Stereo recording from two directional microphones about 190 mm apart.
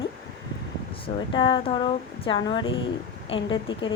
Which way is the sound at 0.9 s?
25° left (ahead or behind).